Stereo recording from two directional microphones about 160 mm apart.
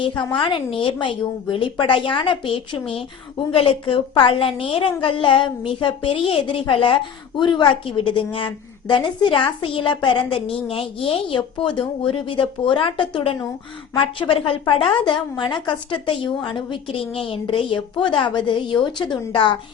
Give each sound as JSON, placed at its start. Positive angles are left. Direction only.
{"t": 0.0, "sound": "a woman's voice", "side_deg": 30}